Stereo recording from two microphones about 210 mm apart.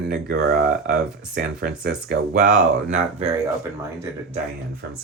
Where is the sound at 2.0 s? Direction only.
40° right (ahead or behind).